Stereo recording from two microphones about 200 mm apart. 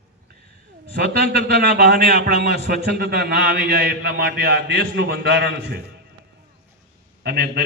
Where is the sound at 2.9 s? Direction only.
50° right (ahead or behind).